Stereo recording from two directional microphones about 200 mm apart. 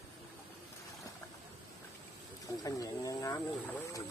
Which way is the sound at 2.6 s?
15° left (ahead or behind).